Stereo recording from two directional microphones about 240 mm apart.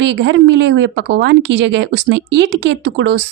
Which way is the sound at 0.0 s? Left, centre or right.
Right.